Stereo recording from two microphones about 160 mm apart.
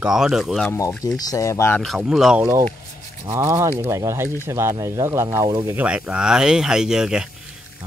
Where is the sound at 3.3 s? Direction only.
15° right (ahead or behind).